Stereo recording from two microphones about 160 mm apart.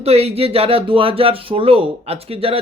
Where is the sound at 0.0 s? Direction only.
40° right (ahead or behind).